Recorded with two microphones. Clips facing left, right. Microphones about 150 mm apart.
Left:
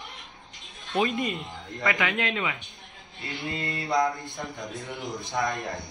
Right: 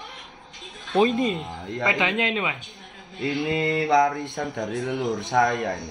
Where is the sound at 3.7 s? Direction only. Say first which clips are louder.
Right 5 dB; 60° right (ahead or behind).